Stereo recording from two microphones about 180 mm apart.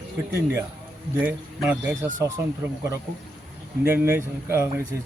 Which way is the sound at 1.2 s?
10° right (ahead or behind).